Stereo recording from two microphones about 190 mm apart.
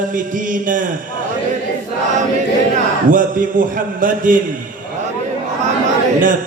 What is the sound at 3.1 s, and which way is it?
A man's voice, 45° right (ahead or behind).